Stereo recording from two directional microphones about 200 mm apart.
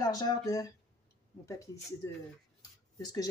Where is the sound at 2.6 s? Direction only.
20° left (ahead or behind).